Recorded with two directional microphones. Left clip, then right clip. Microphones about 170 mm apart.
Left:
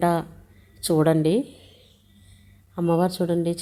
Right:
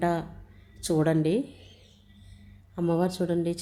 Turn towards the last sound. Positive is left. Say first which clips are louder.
# left 4 dB
turn(degrees=15)  # may be behind; listen again after turning